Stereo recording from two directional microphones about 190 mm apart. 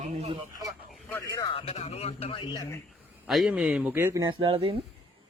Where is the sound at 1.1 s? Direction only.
15° left (ahead or behind).